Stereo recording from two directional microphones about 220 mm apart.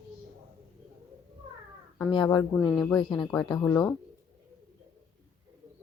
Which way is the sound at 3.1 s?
20° left (ahead or behind).